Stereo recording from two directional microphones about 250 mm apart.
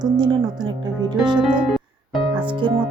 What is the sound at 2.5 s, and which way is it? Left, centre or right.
Speech, centre.